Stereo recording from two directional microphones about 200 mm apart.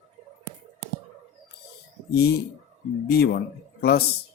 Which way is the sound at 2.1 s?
55° left (ahead or behind).